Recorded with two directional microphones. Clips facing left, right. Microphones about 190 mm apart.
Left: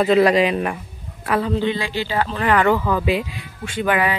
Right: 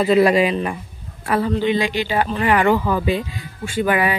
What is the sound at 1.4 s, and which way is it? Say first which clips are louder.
Speech: right 5 dB; 15° right (ahead or behind).